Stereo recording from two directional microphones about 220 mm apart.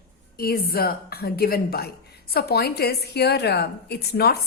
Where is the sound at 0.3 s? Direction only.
45° left (ahead or behind).